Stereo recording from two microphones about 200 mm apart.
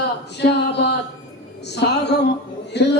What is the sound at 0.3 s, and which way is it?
A man's voice, 60° left (ahead or behind).